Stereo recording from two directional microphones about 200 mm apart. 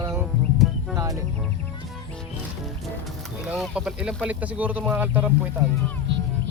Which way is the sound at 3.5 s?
5° right (ahead or behind).